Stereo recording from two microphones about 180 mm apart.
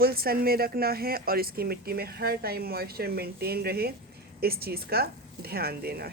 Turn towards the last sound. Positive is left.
turn(degrees=-60)  # may be behind; listen again after turning